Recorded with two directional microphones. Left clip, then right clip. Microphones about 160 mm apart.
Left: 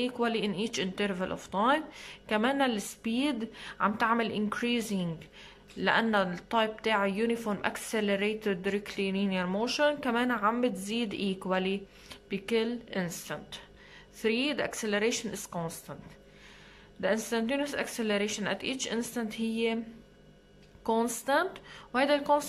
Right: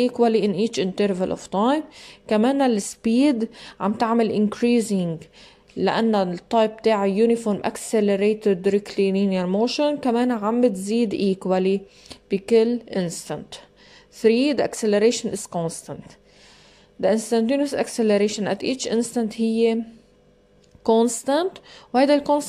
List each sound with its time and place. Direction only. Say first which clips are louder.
0.0 s a woman's voice: right 11 dB; 30° right (ahead or behind)
17.0 s speech: right 10 dB; 30° right (ahead or behind)
20.8 s speech: right 11 dB; 30° right (ahead or behind)